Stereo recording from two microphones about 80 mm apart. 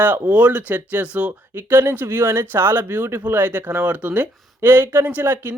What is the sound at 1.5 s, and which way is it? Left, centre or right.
Speech, right.